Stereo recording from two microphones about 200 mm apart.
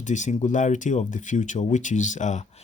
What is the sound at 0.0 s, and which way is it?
Speech, 35° left (ahead or behind).